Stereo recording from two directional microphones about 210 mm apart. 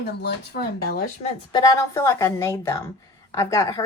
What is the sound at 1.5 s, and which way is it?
Speech, 15° left (ahead or behind).